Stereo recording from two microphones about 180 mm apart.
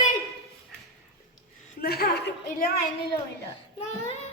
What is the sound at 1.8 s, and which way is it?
Speech, 60° left (ahead or behind).